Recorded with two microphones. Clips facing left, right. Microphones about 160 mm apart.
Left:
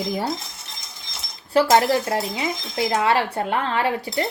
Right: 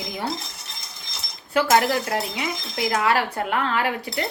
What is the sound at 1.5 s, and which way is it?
Speech, 35° left (ahead or behind).